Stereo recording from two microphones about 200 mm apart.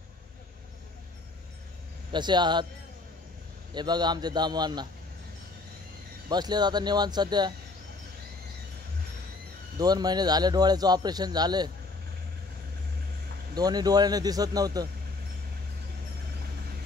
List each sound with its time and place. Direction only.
2.1 s speech: 20° right (ahead or behind)
3.7 s speech: 20° right (ahead or behind)
6.2 s speech: 20° right (ahead or behind)
9.8 s speech: 20° right (ahead or behind)
13.6 s speech: 20° right (ahead or behind)